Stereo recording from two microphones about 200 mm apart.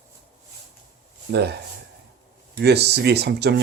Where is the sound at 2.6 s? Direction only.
55° right (ahead or behind).